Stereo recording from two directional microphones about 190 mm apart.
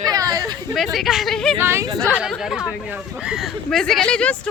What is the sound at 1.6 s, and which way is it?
Speech, 15° right (ahead or behind).